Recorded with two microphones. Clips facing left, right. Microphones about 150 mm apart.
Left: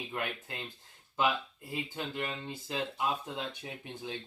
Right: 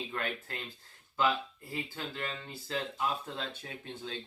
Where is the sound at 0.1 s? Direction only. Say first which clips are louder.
Even; 15° left (ahead or behind).